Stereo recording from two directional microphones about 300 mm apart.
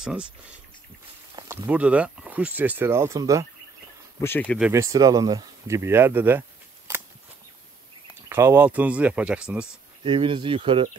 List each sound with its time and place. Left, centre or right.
0.0 s speech: centre
1.3 s speech: centre
4.2 s speech: centre
8.3 s speech: centre
10.0 s speech: centre